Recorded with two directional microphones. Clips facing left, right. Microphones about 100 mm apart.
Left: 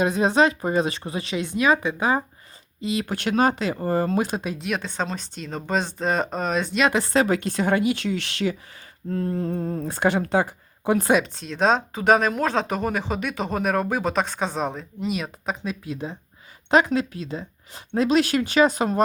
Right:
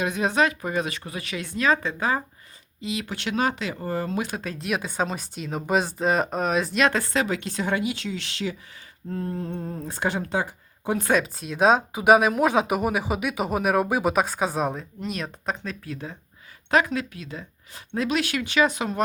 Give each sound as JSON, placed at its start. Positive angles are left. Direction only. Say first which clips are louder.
{"t": 0.0, "sound": "speech", "louder": "left 4 dB", "side_deg": 30}
{"t": 2.8, "sound": "speech", "louder": "left 4 dB", "side_deg": 40}
{"t": 4.5, "sound": "speech", "louder": "even", "side_deg": 0}
{"t": 7.1, "sound": "speech", "louder": "left 5 dB", "side_deg": 40}
{"t": 9.3, "sound": "speech", "louder": "left 5 dB", "side_deg": 85}
{"t": 11.2, "sound": "speech", "louder": "right 1 dB", "side_deg": -5}